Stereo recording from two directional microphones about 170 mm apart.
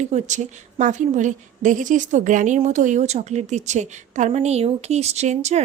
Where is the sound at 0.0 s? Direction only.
45° right (ahead or behind).